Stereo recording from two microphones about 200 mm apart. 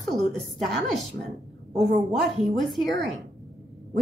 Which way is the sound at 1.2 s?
15° left (ahead or behind).